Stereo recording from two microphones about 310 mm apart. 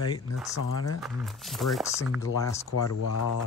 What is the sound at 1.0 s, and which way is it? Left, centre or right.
Speech, centre.